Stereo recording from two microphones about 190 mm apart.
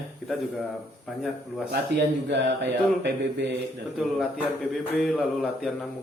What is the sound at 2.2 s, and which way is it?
Mantra, 65° right (ahead or behind).